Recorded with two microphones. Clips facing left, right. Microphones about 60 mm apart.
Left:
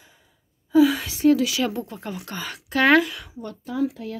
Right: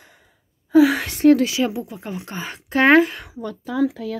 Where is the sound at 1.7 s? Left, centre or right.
Centre; by 3.3 s right.